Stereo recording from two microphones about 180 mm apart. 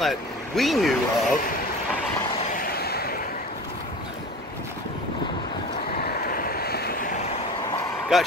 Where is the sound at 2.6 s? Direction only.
60° left (ahead or behind).